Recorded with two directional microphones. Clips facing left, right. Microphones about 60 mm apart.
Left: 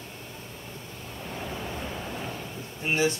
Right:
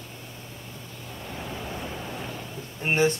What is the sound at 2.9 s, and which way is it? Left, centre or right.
Speech, right.